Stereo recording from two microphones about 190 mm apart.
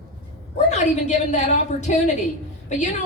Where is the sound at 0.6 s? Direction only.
35° left (ahead or behind).